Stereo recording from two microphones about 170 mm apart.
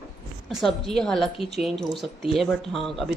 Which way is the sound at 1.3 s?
35° left (ahead or behind).